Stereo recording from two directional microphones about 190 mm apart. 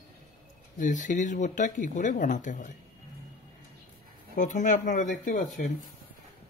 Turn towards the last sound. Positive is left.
turn(degrees=40)  # may be behind; listen again after turning